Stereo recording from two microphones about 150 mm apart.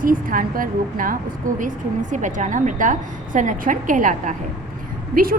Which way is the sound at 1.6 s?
55° right (ahead or behind).